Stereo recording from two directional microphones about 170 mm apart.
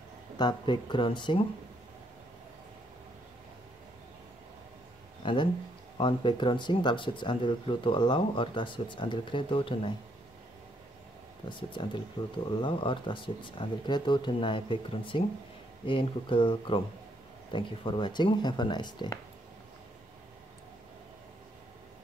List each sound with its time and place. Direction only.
0.4 s speech: 25° left (ahead or behind)
5.2 s a sound: 30° left (ahead or behind)
5.9 s speech: 30° left (ahead or behind)
11.4 s speech: 30° left (ahead or behind)